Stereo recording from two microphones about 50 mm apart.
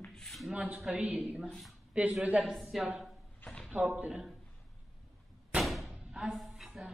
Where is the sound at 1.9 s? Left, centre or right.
Right.